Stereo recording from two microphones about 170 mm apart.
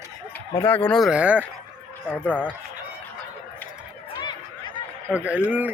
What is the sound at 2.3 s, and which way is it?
Speech, 10° left (ahead or behind).